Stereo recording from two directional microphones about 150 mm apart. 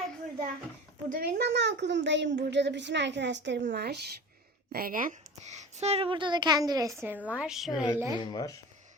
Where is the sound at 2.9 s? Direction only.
90° right.